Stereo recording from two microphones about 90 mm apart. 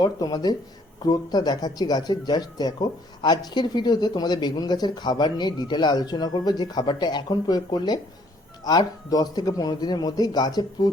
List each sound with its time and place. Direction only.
0.0 s speech: 50° left (ahead or behind)